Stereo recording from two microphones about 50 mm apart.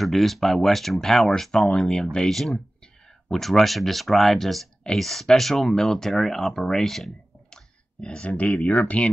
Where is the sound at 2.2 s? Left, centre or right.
Centre.